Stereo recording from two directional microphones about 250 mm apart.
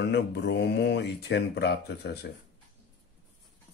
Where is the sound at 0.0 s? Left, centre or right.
Left.